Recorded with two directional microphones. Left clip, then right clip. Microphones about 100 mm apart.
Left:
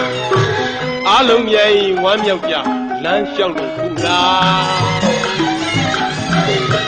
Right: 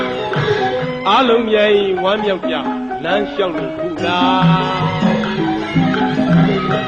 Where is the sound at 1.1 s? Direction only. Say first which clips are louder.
Left 2 dB; 45° left (ahead or behind).